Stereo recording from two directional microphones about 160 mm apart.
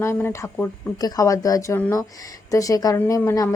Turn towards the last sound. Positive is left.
turn(degrees=15)  # may be behind; listen again after turning